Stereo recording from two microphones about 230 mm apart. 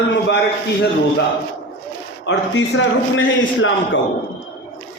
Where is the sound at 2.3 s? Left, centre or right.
Left.